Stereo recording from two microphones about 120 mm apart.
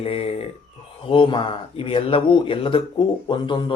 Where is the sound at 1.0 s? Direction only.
45° left (ahead or behind).